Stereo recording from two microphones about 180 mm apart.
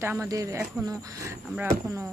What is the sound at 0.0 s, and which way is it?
Speech, 15° right (ahead or behind).